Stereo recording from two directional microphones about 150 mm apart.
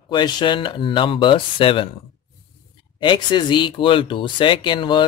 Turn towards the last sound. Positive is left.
turn(degrees=30)  # may be behind; listen again after turning